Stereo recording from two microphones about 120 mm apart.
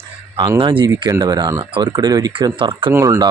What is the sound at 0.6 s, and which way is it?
Speech, 45° right (ahead or behind).